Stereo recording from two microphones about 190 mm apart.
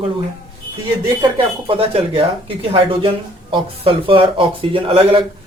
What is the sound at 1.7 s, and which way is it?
Speech, 30° right (ahead or behind).